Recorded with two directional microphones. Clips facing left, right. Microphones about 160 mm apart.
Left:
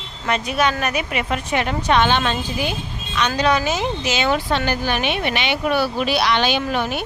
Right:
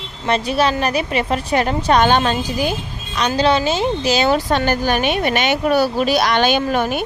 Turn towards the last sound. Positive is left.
turn(degrees=-45)  # may be behind; listen again after turning